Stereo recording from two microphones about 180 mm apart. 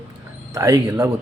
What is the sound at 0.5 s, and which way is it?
Speech, 20° right (ahead or behind).